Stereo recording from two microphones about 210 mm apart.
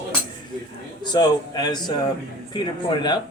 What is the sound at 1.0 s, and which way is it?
Speech, 20° left (ahead or behind).